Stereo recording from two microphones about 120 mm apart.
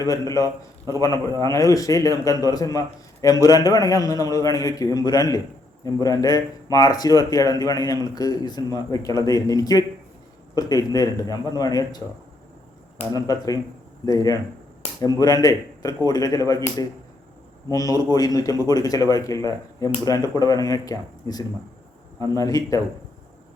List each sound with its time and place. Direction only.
0.1 s a man's voice: 30° left (ahead or behind)
13.0 s speech: 55° left (ahead or behind)
14.0 s a man's voice: 30° left (ahead or behind)